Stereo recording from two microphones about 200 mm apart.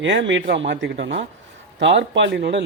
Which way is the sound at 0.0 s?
65° right (ahead or behind).